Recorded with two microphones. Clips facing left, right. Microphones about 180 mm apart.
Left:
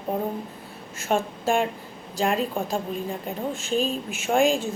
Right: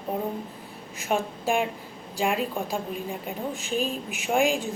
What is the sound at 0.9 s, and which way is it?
Speech, 15° right (ahead or behind).